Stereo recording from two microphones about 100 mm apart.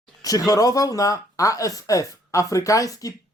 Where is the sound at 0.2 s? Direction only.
40° left (ahead or behind).